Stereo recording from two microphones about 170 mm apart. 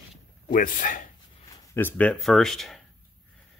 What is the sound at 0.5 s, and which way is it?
Speech, 50° left (ahead or behind).